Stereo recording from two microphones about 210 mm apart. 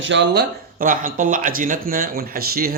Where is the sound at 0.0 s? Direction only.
60° right (ahead or behind).